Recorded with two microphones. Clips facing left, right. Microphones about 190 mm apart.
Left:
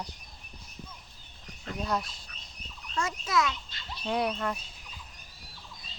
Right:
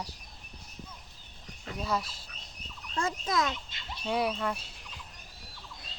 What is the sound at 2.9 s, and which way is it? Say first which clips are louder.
Fowl: left 1 dB; 35° right (ahead or behind).